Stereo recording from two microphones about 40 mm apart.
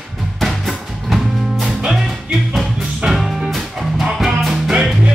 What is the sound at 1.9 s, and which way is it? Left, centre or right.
Music, centre.